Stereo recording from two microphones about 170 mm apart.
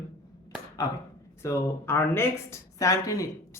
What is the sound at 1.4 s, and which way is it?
Speech, 15° left (ahead or behind).